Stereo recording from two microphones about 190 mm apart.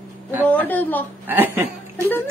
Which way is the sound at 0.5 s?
10° left (ahead or behind).